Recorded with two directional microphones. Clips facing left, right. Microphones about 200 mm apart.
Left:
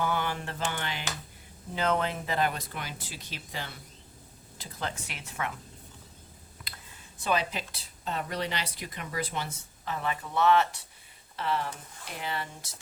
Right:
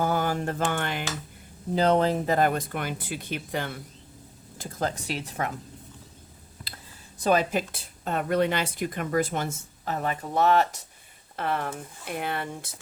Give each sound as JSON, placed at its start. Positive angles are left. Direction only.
{"t": 0.0, "sound": "speech", "side_deg": -40}
{"t": 1.7, "sound": "speech", "side_deg": -35}
{"t": 4.5, "sound": "speech", "side_deg": -45}
{"t": 6.7, "sound": "a sound", "side_deg": -30}
{"t": 7.2, "sound": "speech", "side_deg": -45}
{"t": 11.3, "sound": "speech", "side_deg": -55}